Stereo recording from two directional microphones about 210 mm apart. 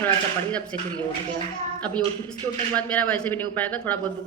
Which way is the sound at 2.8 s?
5° left (ahead or behind).